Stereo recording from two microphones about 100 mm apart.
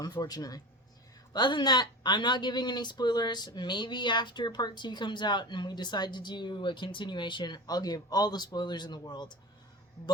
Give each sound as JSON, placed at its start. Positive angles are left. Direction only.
{"t": 0.0, "sound": "speech", "side_deg": 40}